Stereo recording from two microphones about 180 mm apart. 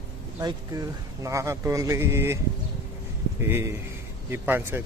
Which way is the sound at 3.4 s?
15° right (ahead or behind).